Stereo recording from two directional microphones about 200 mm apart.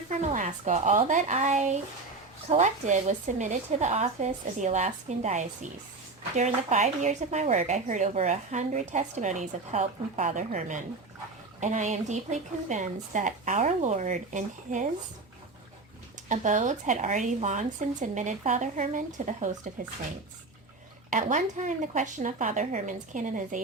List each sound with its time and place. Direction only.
0.1 s speech: 35° right (ahead or behind)
16.3 s speech: 40° right (ahead or behind)
21.1 s speech: 40° right (ahead or behind)